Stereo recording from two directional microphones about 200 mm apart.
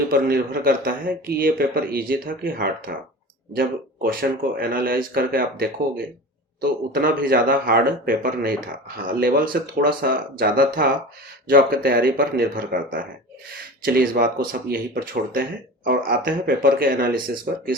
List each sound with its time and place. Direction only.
0.1 s speech: 50° right (ahead or behind)